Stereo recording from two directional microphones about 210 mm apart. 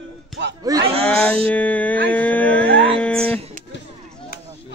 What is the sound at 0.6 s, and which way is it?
Cattle, 15° right (ahead or behind).